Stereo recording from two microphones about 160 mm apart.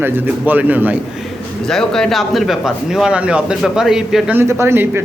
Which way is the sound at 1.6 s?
5° left (ahead or behind).